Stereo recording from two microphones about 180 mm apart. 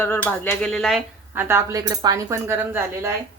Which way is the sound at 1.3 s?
10° right (ahead or behind).